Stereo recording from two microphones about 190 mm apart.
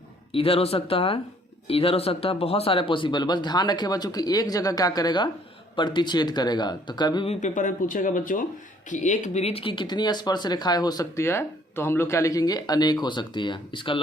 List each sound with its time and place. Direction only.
0.3 s speech: 30° left (ahead or behind)
7.4 s speech: 45° left (ahead or behind); by 14.0 s 25° left (ahead or behind)